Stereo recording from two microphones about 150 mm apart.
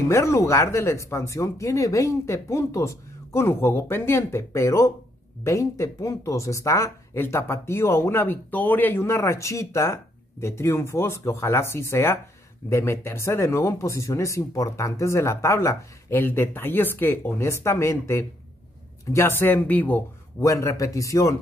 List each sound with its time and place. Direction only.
0.1 s speech: 20° left (ahead or behind)